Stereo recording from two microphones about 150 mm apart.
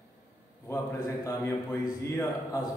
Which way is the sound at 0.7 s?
20° left (ahead or behind).